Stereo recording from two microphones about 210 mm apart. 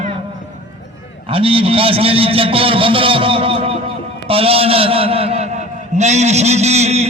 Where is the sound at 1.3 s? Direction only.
25° right (ahead or behind).